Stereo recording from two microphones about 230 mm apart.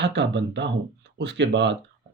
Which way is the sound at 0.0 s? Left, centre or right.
Right.